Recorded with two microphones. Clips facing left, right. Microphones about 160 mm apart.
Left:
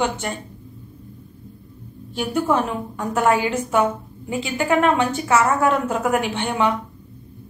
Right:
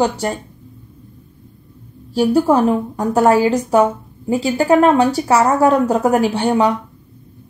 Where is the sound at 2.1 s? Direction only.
35° right (ahead or behind).